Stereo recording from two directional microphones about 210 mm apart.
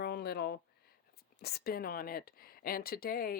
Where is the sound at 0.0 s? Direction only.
50° left (ahead or behind).